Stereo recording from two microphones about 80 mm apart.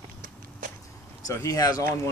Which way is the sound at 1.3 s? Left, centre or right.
Left.